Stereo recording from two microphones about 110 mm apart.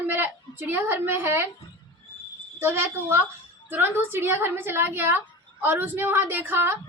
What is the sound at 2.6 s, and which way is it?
A woman's voice, 20° right (ahead or behind).